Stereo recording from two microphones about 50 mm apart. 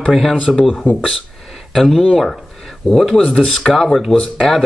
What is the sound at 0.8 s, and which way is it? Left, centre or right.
Speech, left.